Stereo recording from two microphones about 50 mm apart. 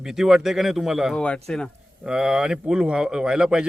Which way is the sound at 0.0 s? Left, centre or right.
Centre.